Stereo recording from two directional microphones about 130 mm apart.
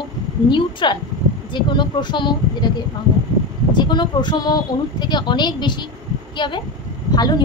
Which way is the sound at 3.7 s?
35° left (ahead or behind).